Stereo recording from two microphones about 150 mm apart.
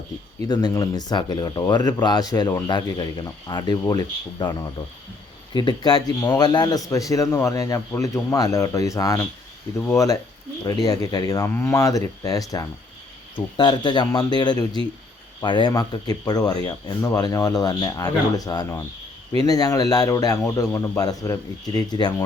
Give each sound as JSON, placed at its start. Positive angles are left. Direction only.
{"t": 0.4, "sound": "a man's voice", "side_deg": 25}
{"t": 5.5, "sound": "a man's voice", "side_deg": 30}